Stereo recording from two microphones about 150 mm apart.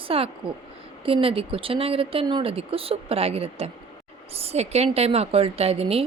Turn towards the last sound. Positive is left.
turn(degrees=-40)  # may be behind; listen again after turning